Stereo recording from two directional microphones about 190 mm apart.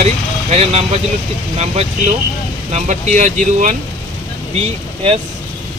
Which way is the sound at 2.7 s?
40° right (ahead or behind).